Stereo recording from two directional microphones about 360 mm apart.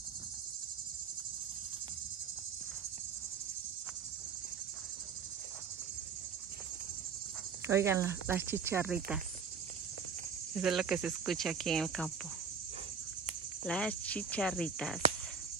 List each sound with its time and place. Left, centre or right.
7.6 s speech: centre
10.5 s speech: centre
13.7 s speech: centre